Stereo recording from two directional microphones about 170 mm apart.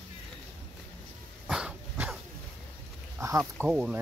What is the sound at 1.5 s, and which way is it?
Dog, 5° right (ahead or behind).